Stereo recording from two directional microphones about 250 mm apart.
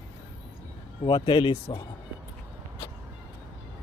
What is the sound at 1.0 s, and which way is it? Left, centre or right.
Speech, centre.